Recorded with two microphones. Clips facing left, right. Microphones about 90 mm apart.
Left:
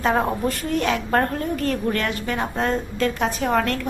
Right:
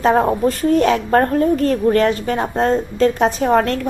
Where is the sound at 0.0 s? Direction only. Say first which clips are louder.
Right 6 dB; 35° right (ahead or behind).